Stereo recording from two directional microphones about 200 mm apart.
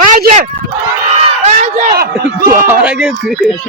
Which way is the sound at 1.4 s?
40° right (ahead or behind).